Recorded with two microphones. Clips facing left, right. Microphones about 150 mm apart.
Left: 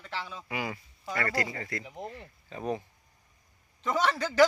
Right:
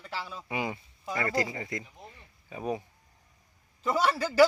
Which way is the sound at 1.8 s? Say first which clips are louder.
Left 10 dB; 75° left (ahead or behind).